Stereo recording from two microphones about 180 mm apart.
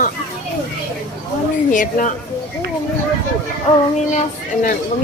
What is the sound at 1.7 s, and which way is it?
Speech, 45° left (ahead or behind).